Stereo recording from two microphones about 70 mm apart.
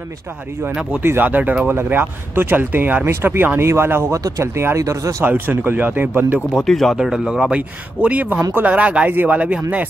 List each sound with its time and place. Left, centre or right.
1.0 s speech: right
4.1 s speech: right
5.2 s speech: right
6.5 s speech: centre; by 8.4 s right
8.4 s speech: right
8.6 s speech: centre